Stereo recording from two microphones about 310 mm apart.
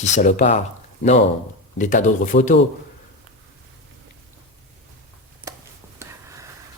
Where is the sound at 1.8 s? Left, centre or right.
Left.